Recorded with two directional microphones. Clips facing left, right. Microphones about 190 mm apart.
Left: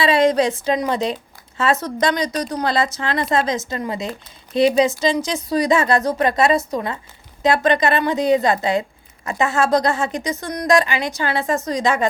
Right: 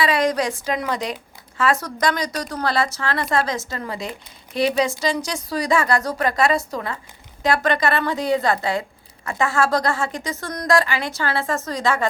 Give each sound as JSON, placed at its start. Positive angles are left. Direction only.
{"t": 0.0, "sound": "a woman's voice", "side_deg": 25}